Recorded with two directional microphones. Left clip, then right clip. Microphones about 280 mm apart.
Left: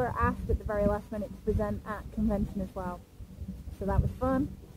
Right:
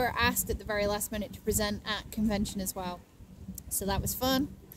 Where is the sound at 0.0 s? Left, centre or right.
Right.